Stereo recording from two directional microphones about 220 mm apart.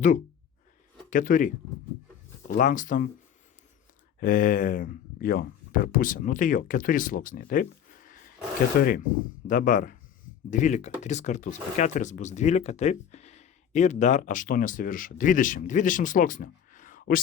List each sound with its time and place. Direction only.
1.1 s speech: 35° left (ahead or behind)
4.2 s speech: 40° left (ahead or behind)